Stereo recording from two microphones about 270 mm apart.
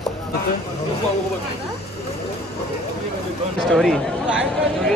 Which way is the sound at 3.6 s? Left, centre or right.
Centre.